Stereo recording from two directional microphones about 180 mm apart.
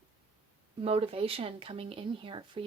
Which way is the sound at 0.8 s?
30° right (ahead or behind).